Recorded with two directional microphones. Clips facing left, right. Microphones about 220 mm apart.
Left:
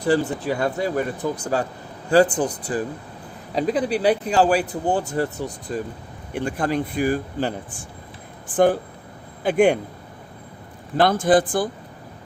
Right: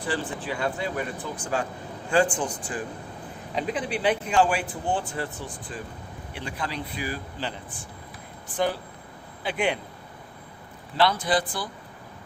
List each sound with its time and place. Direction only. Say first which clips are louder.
0.1 s speech: left 10 dB; 40° left (ahead or behind)
10.9 s speech: left 7 dB; 50° left (ahead or behind)